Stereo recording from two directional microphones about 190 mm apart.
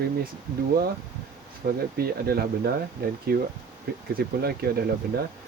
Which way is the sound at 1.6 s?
55° right (ahead or behind).